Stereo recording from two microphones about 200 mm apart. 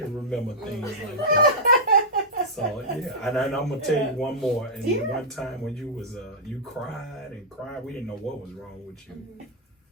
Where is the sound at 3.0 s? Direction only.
Centre (ahead or behind).